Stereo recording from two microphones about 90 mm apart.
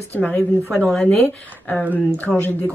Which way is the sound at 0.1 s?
15° left (ahead or behind).